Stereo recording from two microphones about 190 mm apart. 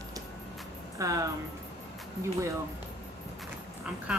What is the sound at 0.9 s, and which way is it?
Speech, 15° right (ahead or behind).